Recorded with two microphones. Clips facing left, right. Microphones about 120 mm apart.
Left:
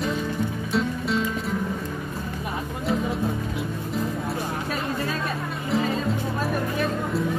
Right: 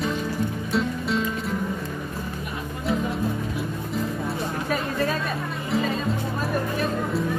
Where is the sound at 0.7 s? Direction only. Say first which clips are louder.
Even; centre (ahead or behind).